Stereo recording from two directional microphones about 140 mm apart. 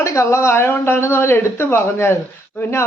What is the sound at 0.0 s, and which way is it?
A man's voice, 20° left (ahead or behind).